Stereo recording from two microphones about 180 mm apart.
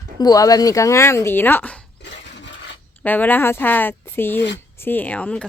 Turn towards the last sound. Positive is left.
turn(degrees=10)  # may be behind; listen again after turning